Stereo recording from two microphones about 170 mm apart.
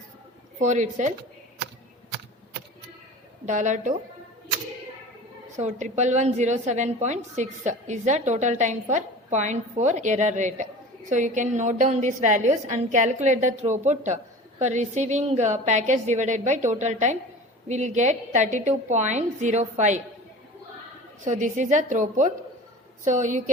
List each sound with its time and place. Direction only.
0.6 s a woman's voice: 45° right (ahead or behind)
3.4 s a woman's voice: 45° right (ahead or behind)
5.5 s a woman's voice: 45° right (ahead or behind)
21.2 s a woman's voice: 45° right (ahead or behind)